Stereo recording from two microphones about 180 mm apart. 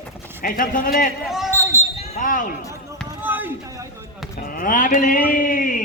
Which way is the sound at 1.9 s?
35° left (ahead or behind).